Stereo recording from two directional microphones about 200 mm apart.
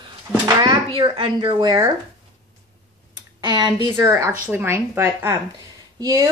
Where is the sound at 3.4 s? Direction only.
20° right (ahead or behind).